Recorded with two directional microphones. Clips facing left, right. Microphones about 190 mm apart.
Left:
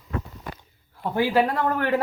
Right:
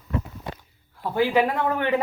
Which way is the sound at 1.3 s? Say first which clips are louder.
Even; 5° right (ahead or behind).